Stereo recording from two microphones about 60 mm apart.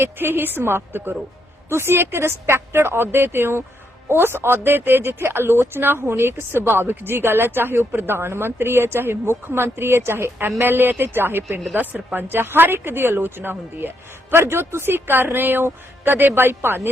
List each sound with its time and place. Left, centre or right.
0.0 s speech: right